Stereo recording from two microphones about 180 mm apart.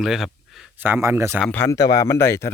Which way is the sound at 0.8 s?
10° right (ahead or behind).